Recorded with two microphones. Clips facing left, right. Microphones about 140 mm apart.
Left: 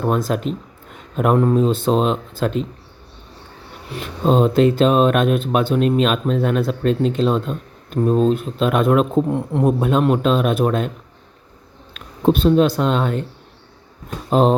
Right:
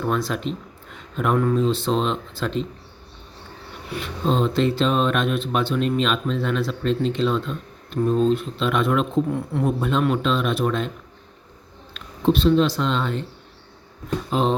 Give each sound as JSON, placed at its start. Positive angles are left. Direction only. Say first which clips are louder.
{"t": 0.0, "sound": "speech", "louder": "left 4 dB", "side_deg": 45}
{"t": 4.0, "sound": "speech", "louder": "left 6 dB", "side_deg": 45}
{"t": 11.9, "sound": "speech", "louder": "left 3 dB", "side_deg": 50}
{"t": 14.3, "sound": "speech", "louder": "left 7 dB", "side_deg": 45}